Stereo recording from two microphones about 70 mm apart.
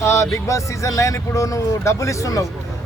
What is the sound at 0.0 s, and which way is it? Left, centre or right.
Speech, left.